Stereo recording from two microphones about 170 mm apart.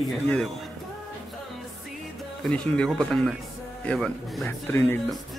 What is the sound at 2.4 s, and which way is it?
Speech, 5° left (ahead or behind).